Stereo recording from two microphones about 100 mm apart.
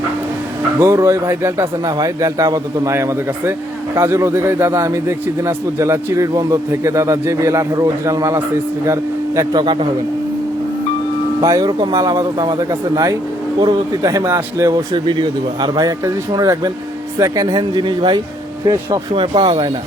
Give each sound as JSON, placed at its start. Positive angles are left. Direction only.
{"t": 0.8, "sound": "a man's voice", "side_deg": -30}
{"t": 9.5, "sound": "speech", "side_deg": -45}
{"t": 11.3, "sound": "a man's voice", "side_deg": -40}
{"t": 13.6, "sound": "a man's voice", "side_deg": -40}
{"t": 14.7, "sound": "speech", "side_deg": -50}
{"t": 16.0, "sound": "a man's voice", "side_deg": -35}
{"t": 17.6, "sound": "speech", "side_deg": -50}
{"t": 19.1, "sound": "speech", "side_deg": -60}